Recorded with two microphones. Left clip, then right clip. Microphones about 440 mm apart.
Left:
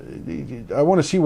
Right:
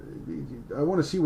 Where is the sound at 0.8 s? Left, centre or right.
Left.